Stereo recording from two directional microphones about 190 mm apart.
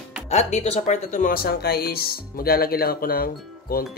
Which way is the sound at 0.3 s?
35° left (ahead or behind).